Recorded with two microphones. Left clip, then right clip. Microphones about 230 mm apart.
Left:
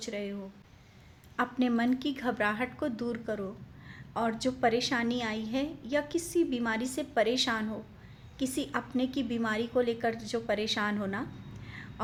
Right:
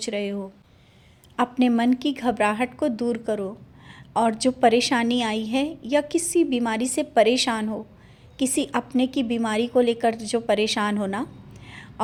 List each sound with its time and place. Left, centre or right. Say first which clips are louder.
0.0 s a woman's voice: right 9 dB; right
1.4 s a woman's voice: right 8 dB; right